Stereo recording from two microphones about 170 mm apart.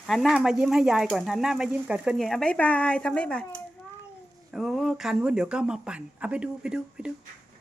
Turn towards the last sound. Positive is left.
turn(degrees=-5)  # may be behind; listen again after turning